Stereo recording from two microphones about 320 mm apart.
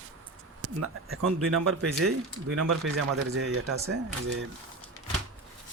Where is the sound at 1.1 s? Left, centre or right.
Right.